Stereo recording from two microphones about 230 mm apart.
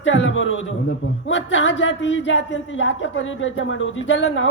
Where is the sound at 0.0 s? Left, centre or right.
Left.